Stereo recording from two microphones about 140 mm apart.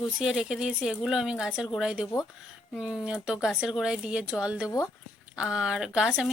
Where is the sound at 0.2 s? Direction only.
5° right (ahead or behind).